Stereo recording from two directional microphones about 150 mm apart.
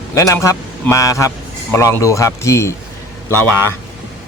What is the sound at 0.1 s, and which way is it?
A man's voice, 20° left (ahead or behind).